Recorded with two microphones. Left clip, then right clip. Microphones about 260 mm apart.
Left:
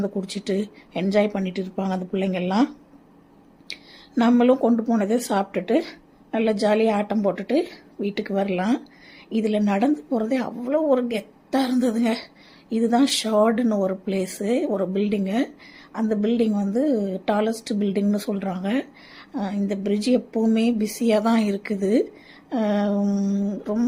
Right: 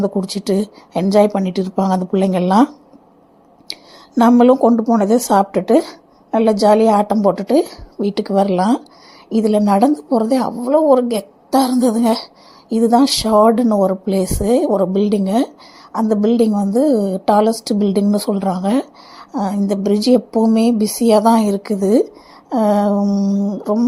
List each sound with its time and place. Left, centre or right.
0.0 s a woman's voice: centre
3.7 s a woman's voice: centre